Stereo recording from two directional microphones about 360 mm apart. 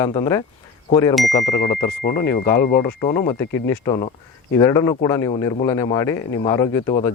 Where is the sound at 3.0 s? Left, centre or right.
Centre.